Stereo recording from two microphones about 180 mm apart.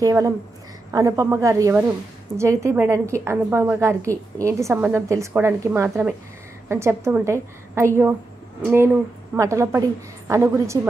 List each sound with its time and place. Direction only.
0.0 s a woman's voice: 20° right (ahead or behind)
8.6 s a woman's voice: 10° right (ahead or behind)